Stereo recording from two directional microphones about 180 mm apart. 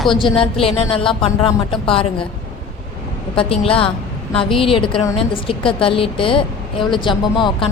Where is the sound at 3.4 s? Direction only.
30° left (ahead or behind).